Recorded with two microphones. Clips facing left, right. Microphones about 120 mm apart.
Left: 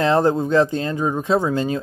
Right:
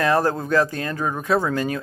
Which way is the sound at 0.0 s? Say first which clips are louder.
Left 3 dB; 20° left (ahead or behind).